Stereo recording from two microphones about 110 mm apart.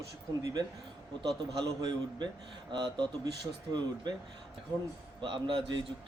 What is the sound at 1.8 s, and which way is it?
Speech, 40° right (ahead or behind).